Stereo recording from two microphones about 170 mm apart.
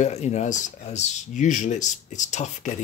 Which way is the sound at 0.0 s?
40° left (ahead or behind).